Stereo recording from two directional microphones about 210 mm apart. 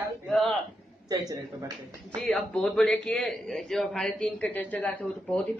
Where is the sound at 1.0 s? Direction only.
20° right (ahead or behind).